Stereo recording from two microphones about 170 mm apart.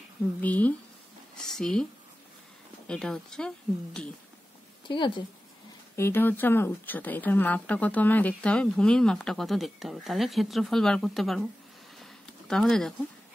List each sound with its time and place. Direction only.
0.4 s speech: 10° left (ahead or behind)
2.9 s speech: 5° left (ahead or behind)
4.8 s speech: 30° left (ahead or behind)
5.9 s speech: 15° left (ahead or behind)
12.0 s a sound: 5° left (ahead or behind)